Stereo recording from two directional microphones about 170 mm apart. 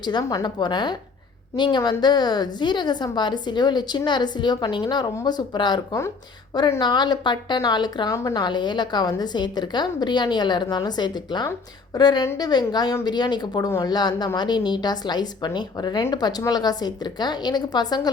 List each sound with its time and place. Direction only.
0.0 s a woman's voice: 25° left (ahead or behind)